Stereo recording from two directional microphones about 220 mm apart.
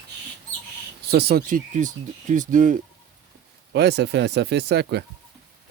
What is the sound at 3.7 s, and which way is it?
Speech, 50° right (ahead or behind).